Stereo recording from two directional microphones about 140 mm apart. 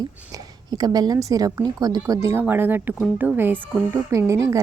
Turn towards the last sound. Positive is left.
turn(degrees=-20)  # may be behind; listen again after turning